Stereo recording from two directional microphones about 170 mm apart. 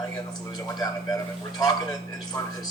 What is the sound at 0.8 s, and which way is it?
Speech, 20° left (ahead or behind).